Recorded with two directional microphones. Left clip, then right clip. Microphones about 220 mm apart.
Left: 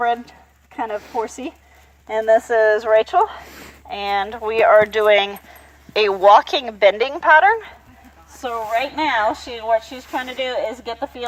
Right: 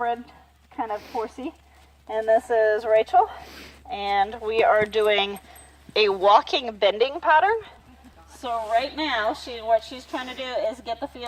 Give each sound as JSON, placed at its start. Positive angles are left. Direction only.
{"t": 0.8, "sound": "speech", "side_deg": 45}
{"t": 3.4, "sound": "a sound", "side_deg": 10}
{"t": 3.8, "sound": "a woman's voice", "side_deg": 40}